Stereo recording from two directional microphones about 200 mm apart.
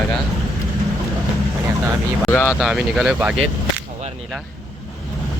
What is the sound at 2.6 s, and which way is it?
Speech, centre (ahead or behind).